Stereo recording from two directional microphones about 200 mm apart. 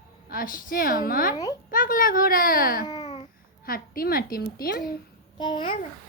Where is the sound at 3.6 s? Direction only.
45° left (ahead or behind).